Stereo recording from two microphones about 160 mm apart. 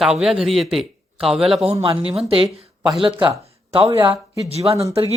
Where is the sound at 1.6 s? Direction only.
35° right (ahead or behind).